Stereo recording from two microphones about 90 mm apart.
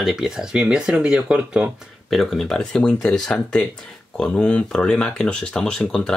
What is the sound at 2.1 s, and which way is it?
Speech, centre (ahead or behind).